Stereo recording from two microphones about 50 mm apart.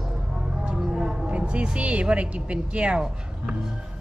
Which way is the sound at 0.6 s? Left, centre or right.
Centre.